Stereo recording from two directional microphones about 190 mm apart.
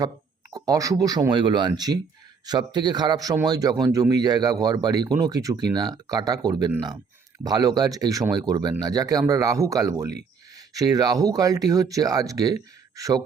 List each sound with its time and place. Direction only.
0.5 s speech: 20° right (ahead or behind)